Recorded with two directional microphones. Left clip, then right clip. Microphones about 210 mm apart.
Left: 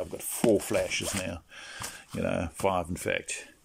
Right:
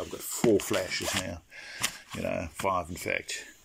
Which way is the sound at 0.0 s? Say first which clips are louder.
Even; 10° left (ahead or behind).